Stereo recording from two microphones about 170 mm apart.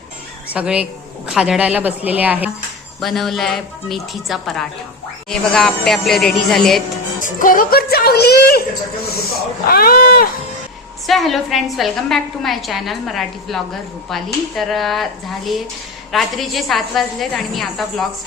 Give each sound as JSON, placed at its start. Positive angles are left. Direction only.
{"t": 0.5, "sound": "a woman's voice", "side_deg": -5}
{"t": 3.0, "sound": "a woman's voice", "side_deg": 0}
{"t": 7.3, "sound": "speech", "side_deg": 55}
{"t": 9.6, "sound": "speech", "side_deg": 60}
{"t": 11.0, "sound": "a woman's voice", "side_deg": 0}
{"t": 16.1, "sound": "a woman's voice", "side_deg": 0}